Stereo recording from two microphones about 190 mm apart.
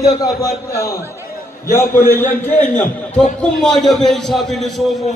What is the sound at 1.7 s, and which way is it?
A man's voice, 10° left (ahead or behind).